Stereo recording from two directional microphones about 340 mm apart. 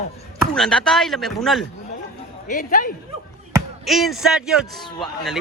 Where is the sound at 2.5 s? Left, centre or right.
Left.